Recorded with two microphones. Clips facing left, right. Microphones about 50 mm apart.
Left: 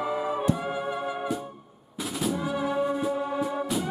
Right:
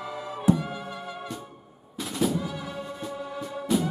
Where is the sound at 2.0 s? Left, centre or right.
Centre.